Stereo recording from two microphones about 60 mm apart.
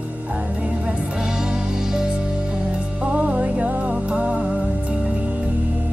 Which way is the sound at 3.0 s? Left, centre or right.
Right.